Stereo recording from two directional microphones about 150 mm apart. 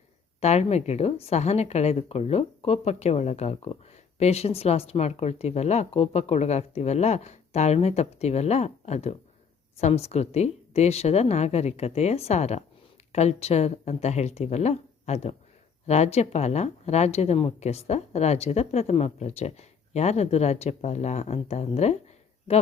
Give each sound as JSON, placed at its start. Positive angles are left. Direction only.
{"t": 0.3, "sound": "speech", "side_deg": 45}